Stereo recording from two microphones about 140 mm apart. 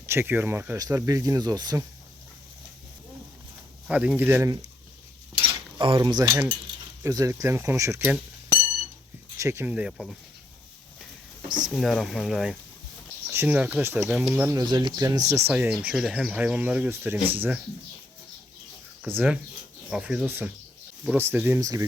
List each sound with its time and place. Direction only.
0.0 s speech: 15° right (ahead or behind)
3.8 s speech: 10° right (ahead or behind)
5.5 s cutlery: 35° right (ahead or behind)
7.0 s speech: 25° right (ahead or behind)
9.4 s speech: 20° right (ahead or behind)
11.4 s speech: 30° right (ahead or behind)
11.7 s speech: centre (ahead or behind)
13.3 s speech: 15° right (ahead or behind)
14.5 s speech: 30° right (ahead or behind); by 15.7 s 15° right (ahead or behind)
15.7 s speech: 5° right (ahead or behind)
19.0 s speech: 15° right (ahead or behind)